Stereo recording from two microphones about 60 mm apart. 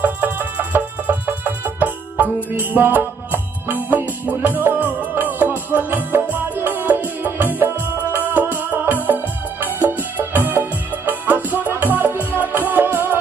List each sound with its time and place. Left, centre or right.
0.0 s music: right
9.0 s organ: right
9.8 s music: right